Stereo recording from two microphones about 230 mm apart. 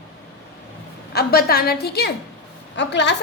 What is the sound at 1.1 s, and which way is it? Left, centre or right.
A woman's voice, left.